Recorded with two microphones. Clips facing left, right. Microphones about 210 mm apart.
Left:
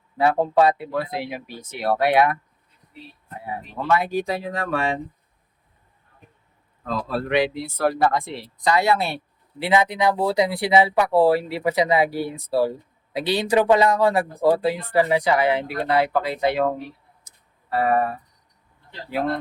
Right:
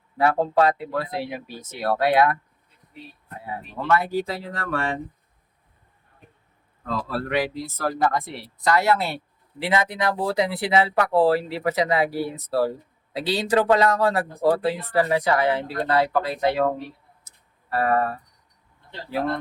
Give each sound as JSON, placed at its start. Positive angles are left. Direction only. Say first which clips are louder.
{"t": 0.2, "sound": "speech", "louder": "left 2 dB", "side_deg": 20}
{"t": 3.4, "sound": "speech", "louder": "left 1 dB", "side_deg": 15}
{"t": 6.8, "sound": "speech", "louder": "left 2 dB", "side_deg": 20}
{"t": 7.3, "sound": "speech", "louder": "left 5 dB", "side_deg": 70}
{"t": 8.1, "sound": "speech", "louder": "left 2 dB", "side_deg": 15}
{"t": 17.2, "sound": "a sound", "louder": "left 3 dB", "side_deg": 15}